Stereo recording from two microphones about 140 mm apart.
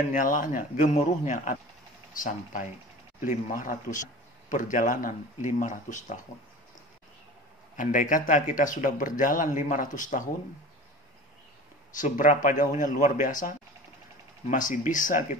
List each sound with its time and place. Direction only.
0.1 s speech: 70° left (ahead or behind)
7.7 s speech: 70° left (ahead or behind)
11.9 s speech: 65° left (ahead or behind)